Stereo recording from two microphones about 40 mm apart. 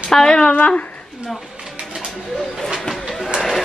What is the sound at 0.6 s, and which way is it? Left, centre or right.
Speech, left.